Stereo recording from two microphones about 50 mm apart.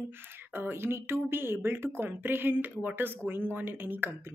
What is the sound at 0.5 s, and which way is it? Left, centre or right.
A woman's voice, right.